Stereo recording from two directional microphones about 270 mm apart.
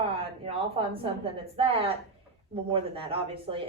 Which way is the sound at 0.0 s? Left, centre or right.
Centre.